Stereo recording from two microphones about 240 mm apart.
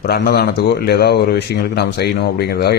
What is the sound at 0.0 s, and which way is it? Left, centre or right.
A man's voice, left.